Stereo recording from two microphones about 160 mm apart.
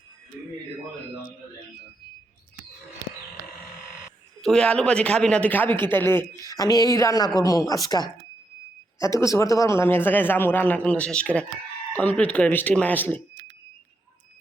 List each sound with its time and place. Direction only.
4.4 s a man's voice: 5° left (ahead or behind)